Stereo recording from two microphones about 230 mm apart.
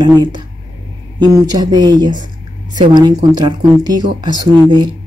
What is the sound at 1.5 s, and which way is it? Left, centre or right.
Speech, centre.